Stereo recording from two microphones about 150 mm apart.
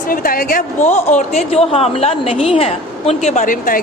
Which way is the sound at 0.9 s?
50° left (ahead or behind).